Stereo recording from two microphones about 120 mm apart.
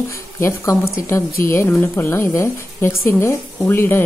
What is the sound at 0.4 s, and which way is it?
Speech, 25° left (ahead or behind).